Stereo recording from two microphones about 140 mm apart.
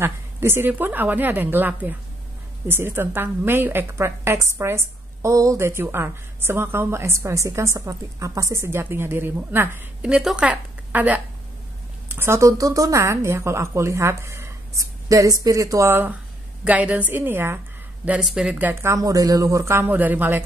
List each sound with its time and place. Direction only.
0.0 s a woman's voice: 15° right (ahead or behind)